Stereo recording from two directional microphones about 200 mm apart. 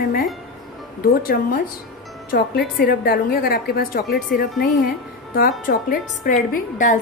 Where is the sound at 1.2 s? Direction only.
45° left (ahead or behind).